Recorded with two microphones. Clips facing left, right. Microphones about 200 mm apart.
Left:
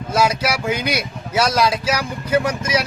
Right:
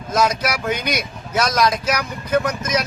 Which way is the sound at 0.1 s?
10° left (ahead or behind).